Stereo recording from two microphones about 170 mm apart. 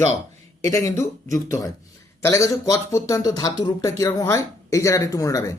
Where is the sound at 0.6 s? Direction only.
20° left (ahead or behind).